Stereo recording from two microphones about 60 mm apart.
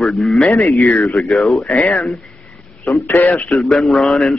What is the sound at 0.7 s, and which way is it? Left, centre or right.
Speech, left.